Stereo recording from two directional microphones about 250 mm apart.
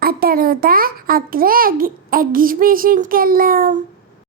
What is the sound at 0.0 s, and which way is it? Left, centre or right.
A child's voice, right.